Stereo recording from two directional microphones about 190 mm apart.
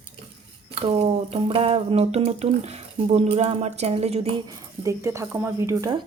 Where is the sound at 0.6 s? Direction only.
30° right (ahead or behind).